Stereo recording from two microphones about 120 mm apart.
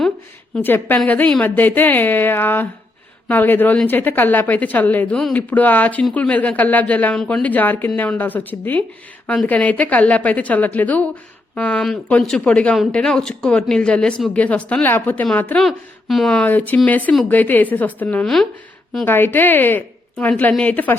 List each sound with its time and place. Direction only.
0.5 s speech: 15° left (ahead or behind)
15.5 s speech: centre (ahead or behind)
19.0 s speech: 20° left (ahead or behind)